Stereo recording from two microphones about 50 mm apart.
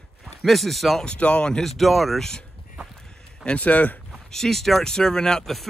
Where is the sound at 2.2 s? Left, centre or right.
Centre.